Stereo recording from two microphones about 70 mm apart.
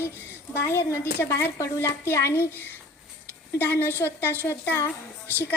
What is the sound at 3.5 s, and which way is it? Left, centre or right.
A woman's voice, left.